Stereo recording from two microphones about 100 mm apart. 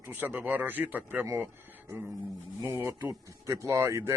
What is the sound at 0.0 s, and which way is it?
Speech, 20° right (ahead or behind).